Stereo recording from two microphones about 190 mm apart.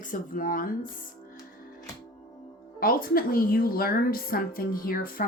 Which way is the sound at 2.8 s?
50° left (ahead or behind).